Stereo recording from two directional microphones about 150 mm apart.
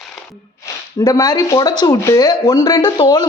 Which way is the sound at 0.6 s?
25° left (ahead or behind).